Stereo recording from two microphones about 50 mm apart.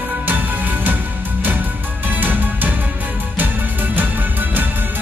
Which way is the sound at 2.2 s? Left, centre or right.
Right.